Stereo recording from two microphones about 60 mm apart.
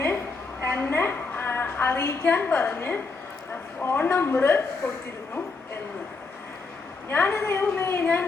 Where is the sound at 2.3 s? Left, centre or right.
Left.